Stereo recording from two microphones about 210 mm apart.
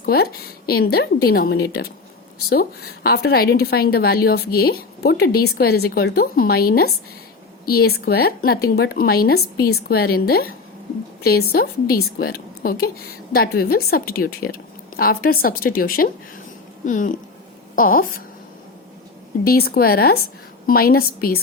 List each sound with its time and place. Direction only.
0.0 s a woman's voice: 45° left (ahead or behind)
19.5 s a woman's voice: 45° left (ahead or behind)